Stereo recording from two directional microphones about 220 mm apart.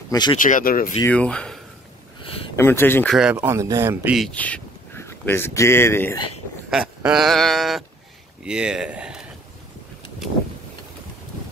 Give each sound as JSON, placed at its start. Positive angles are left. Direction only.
{"t": 0.1, "sound": "speech", "side_deg": 20}
{"t": 0.4, "sound": "speech", "side_deg": 35}
{"t": 0.9, "sound": "a sound", "side_deg": 10}
{"t": 2.5, "sound": "speech", "side_deg": 10}
{"t": 3.2, "sound": "speech", "side_deg": -10}
{"t": 6.7, "sound": "a sound", "side_deg": -5}